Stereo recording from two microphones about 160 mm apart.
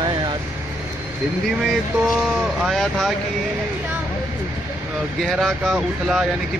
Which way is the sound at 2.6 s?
Centre (ahead or behind).